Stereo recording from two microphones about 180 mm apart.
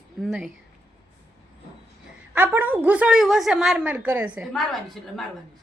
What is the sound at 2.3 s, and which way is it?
A woman's voice, 10° right (ahead or behind).